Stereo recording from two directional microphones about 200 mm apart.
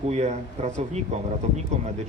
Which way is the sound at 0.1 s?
35° right (ahead or behind).